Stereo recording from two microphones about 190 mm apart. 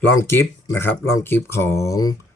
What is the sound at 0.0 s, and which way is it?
Speech, 15° left (ahead or behind).